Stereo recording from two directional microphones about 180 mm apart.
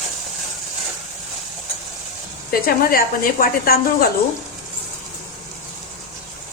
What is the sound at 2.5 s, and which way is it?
Speech, 55° left (ahead or behind).